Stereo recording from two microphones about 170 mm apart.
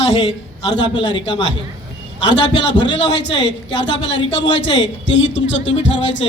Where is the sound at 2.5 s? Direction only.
90° left.